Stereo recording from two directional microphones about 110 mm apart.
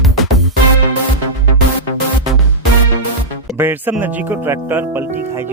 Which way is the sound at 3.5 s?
20° right (ahead or behind).